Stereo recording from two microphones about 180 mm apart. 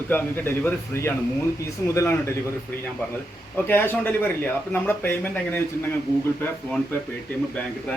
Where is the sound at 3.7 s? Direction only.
10° left (ahead or behind).